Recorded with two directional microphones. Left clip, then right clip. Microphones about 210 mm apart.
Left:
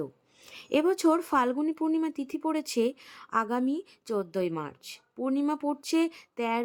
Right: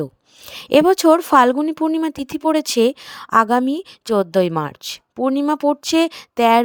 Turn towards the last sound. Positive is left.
turn(degrees=-45)  # may be behind; listen again after turning